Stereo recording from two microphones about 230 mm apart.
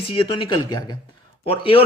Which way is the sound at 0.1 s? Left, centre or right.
Left.